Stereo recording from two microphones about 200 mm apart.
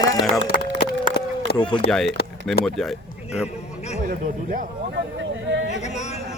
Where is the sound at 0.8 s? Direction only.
55° left (ahead or behind).